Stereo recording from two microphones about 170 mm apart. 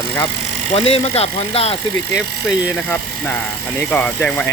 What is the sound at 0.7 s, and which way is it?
Speech, 35° left (ahead or behind).